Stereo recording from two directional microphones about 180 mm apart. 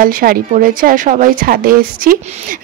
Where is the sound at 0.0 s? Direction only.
55° right (ahead or behind).